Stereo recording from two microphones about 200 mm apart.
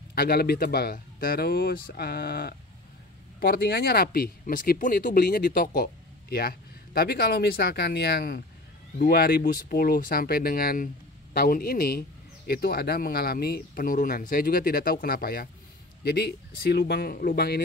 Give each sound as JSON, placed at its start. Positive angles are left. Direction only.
{"t": 0.1, "sound": "speech", "side_deg": 50}